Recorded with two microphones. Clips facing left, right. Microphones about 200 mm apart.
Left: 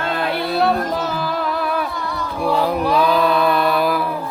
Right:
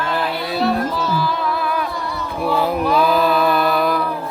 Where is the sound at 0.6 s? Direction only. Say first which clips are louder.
Right 1 dB; 50° left (ahead or behind).